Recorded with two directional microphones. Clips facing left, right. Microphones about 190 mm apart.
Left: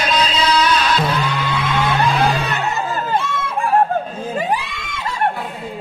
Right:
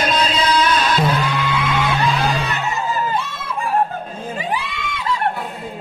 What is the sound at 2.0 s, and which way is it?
Music, 55° left (ahead or behind).